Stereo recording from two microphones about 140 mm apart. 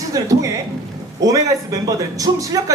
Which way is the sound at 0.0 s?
25° right (ahead or behind).